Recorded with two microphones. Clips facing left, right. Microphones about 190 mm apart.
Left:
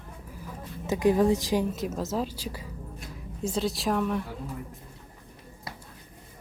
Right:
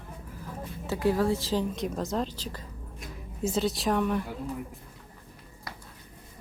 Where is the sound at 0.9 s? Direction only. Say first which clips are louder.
Left 3 dB; 15° left (ahead or behind).